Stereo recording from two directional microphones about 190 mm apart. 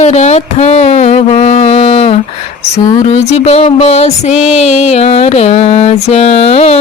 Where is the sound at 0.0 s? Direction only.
35° left (ahead or behind).